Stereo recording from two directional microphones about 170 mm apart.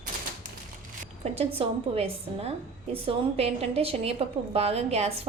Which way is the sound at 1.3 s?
35° right (ahead or behind).